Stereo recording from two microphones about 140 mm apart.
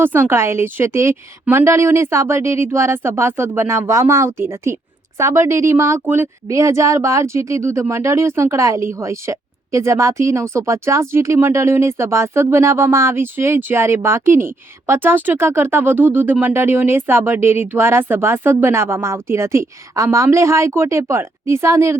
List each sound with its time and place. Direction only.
0.0 s a woman's voice: 15° right (ahead or behind)